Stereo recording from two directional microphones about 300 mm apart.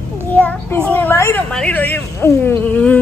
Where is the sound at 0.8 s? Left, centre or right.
Centre.